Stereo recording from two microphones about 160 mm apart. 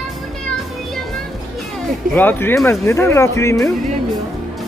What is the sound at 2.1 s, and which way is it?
Speech, 15° left (ahead or behind).